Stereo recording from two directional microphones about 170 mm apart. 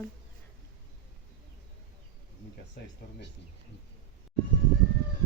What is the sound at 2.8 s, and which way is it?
Speech, 70° left (ahead or behind).